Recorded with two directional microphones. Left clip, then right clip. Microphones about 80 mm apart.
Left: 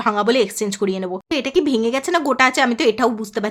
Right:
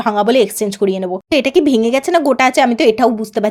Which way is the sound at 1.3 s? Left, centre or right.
Right.